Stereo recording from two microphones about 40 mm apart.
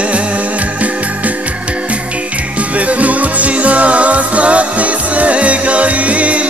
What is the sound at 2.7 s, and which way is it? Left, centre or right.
Music, right.